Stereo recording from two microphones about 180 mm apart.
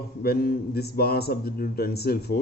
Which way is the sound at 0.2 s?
55° left (ahead or behind).